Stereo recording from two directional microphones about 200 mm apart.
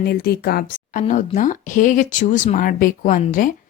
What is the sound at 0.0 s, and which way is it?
Speech, 50° left (ahead or behind).